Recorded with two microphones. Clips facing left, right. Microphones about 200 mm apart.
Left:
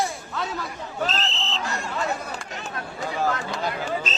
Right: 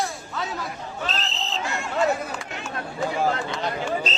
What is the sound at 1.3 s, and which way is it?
Hubbub, 40° right (ahead or behind).